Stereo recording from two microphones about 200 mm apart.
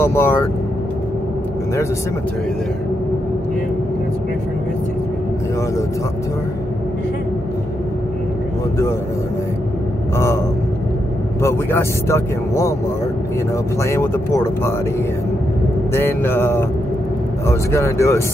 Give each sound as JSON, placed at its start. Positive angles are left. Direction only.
{"t": 0.0, "sound": "a man's voice", "side_deg": 10}
{"t": 10.1, "sound": "a man's voice", "side_deg": 15}
{"t": 11.4, "sound": "a man's voice", "side_deg": 15}
{"t": 13.8, "sound": "a man's voice", "side_deg": 15}
{"t": 15.9, "sound": "a man's voice", "side_deg": 15}